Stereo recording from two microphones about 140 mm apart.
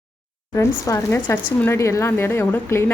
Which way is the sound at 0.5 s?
20° left (ahead or behind).